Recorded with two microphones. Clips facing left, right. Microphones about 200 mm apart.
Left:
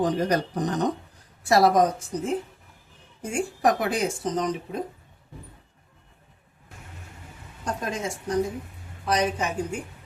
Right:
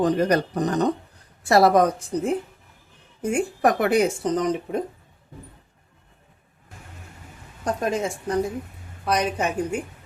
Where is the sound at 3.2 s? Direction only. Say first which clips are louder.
Right 4 dB; 60° right (ahead or behind).